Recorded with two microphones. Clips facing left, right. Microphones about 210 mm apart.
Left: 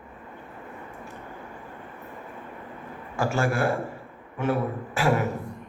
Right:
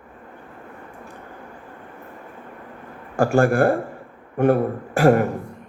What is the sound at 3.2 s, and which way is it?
A man's voice, 50° right (ahead or behind).